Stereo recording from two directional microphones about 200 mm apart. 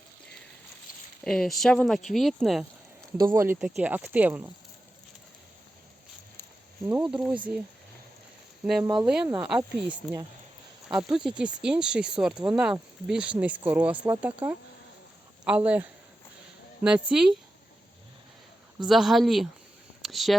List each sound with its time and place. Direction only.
1.2 s speech: 5° left (ahead or behind)
3.2 s speech: 15° right (ahead or behind)
6.8 s speech: 5° right (ahead or behind)
8.8 s speech: 20° right (ahead or behind)
9.0 s speech: 5° right (ahead or behind)
15.4 s speech: 5° right (ahead or behind)
18.9 s speech: centre (ahead or behind)
20.0 s a sound: centre (ahead or behind)